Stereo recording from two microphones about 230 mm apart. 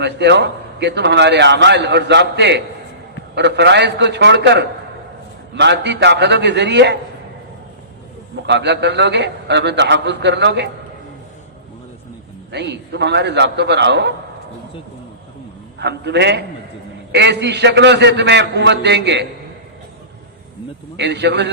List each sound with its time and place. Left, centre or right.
0.0 s a man's voice: right
8.4 s a man's voice: right
12.5 s a man's voice: right
15.8 s a man's voice: right
20.9 s a man's voice: right